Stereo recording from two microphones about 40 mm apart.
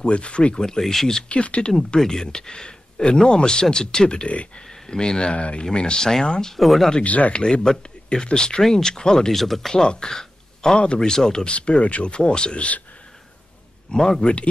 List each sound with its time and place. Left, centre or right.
0.0 s speech: left
0.6 s speech: centre
1.3 s speech: left
1.8 s speech: centre
4.3 s speech: left
4.6 s speech: centre
6.5 s speech: centre
7.1 s speech: left
7.3 s speech: left
9.3 s speech: centre
9.8 s speech: centre
11.5 s speech: left
13.9 s speech: centre
14.2 s speech: left